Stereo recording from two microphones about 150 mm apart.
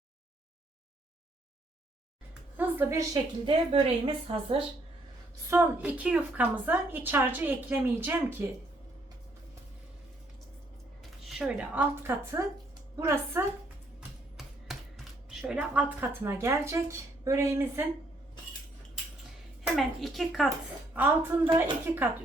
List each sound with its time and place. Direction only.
2.6 s a woman's voice: 15° right (ahead or behind)
3.4 s a woman's voice: 40° right (ahead or behind)
5.5 s a woman's voice: 10° right (ahead or behind)
11.3 s a woman's voice: 5° right (ahead or behind)
14.3 s a sound: centre (ahead or behind); by 16.8 s 15° right (ahead or behind)
17.2 s a woman's voice: 20° right (ahead or behind)
19.7 s speech: centre (ahead or behind)
20.9 s a woman's voice: 10° right (ahead or behind)